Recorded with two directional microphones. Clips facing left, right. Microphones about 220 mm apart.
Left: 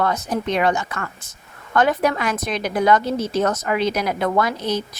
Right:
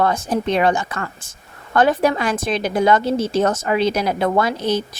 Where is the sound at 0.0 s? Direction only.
30° right (ahead or behind).